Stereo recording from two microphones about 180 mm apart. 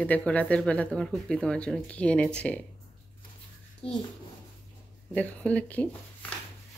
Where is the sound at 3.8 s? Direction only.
35° left (ahead or behind).